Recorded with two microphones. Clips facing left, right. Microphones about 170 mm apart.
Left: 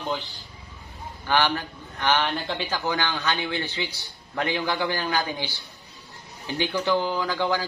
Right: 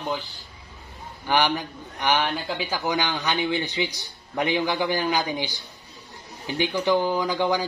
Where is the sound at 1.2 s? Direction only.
15° right (ahead or behind).